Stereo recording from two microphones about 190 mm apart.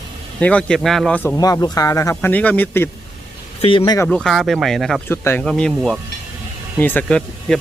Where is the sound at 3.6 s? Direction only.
30° left (ahead or behind).